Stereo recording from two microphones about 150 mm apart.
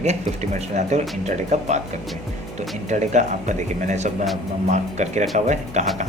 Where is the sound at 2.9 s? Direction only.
50° right (ahead or behind).